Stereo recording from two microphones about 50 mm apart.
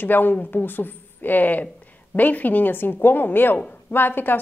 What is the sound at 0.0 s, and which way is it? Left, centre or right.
A woman's voice, left.